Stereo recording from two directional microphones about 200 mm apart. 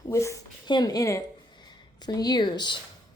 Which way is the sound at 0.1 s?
15° left (ahead or behind).